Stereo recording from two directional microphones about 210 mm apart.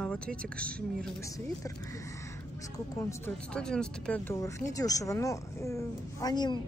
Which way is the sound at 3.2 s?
5° left (ahead or behind).